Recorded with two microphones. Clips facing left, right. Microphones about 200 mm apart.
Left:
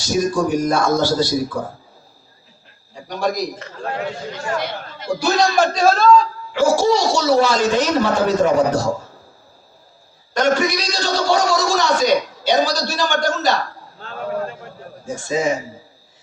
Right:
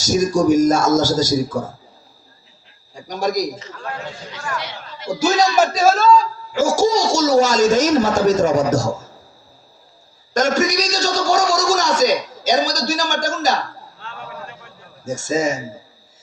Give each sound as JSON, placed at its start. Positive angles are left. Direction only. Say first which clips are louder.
{"t": 0.0, "sound": "a man's voice", "louder": "right 3 dB", "side_deg": -45}
{"t": 2.9, "sound": "a sound", "louder": "right 1 dB", "side_deg": -40}
{"t": 4.5, "sound": "speech", "louder": "left 5 dB", "side_deg": 50}
{"t": 5.5, "sound": "speech", "louder": "even", "side_deg": -5}
{"t": 6.5, "sound": "a man's voice", "louder": "left 1 dB", "side_deg": -45}
{"t": 10.3, "sound": "a man's voice", "louder": "even", "side_deg": -45}
{"t": 14.0, "sound": "a sound", "louder": "left 10 dB", "side_deg": 40}
{"t": 15.0, "sound": "a man's voice", "louder": "right 1 dB", "side_deg": -45}